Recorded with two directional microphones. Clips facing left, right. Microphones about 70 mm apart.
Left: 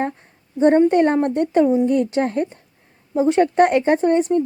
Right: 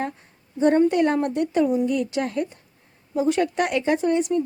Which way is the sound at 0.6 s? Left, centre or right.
Left.